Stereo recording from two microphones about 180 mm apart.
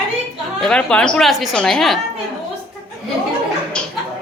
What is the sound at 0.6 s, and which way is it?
A woman's voice, 5° left (ahead or behind).